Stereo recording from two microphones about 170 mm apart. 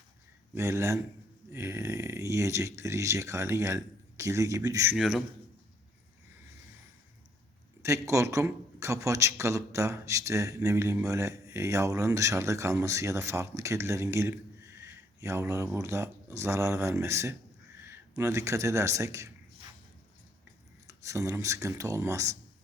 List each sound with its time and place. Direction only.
0.5 s a man's voice: 15° right (ahead or behind)
4.9 s a man's voice: centre (ahead or behind)
7.8 s a man's voice: 20° right (ahead or behind)
20.8 s a man's voice: 20° right (ahead or behind)